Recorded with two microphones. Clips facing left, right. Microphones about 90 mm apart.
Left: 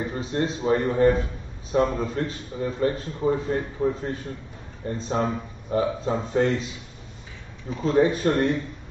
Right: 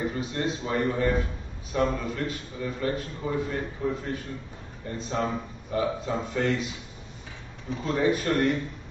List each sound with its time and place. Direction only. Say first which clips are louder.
0.1 s a man's voice: left 3 dB; 35° left (ahead or behind)
7.8 s a man's voice: left 5 dB; 30° left (ahead or behind)